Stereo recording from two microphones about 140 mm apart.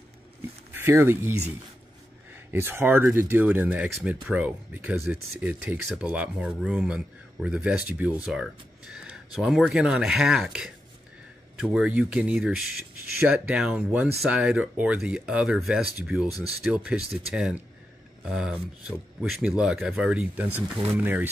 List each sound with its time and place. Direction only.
0.7 s speech: 15° right (ahead or behind)
2.3 s speech: 15° right (ahead or behind)